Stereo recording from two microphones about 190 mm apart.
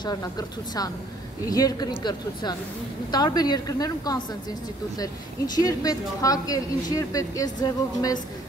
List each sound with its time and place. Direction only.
0.0 s speech: 20° left (ahead or behind)